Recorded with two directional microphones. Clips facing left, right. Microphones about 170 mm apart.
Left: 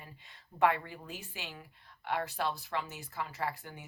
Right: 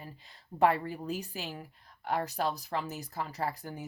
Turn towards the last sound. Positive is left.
turn(degrees=-40)  # may be behind; listen again after turning